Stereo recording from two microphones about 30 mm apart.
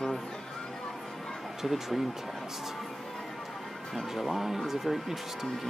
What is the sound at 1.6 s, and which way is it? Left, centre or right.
Speech, centre.